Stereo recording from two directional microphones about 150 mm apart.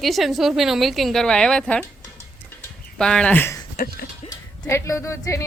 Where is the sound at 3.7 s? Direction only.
75° left (ahead or behind).